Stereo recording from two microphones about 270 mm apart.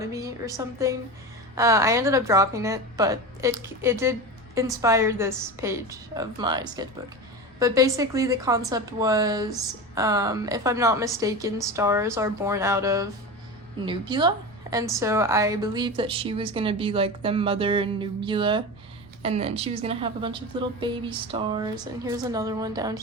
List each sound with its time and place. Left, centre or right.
0.0 s a woman's voice: centre